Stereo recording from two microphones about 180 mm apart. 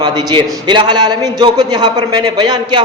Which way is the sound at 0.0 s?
25° right (ahead or behind).